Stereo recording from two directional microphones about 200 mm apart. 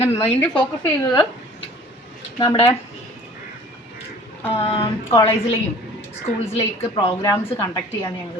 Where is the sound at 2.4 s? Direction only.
25° left (ahead or behind).